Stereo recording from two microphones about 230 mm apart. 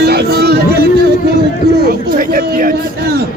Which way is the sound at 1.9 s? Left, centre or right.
Right.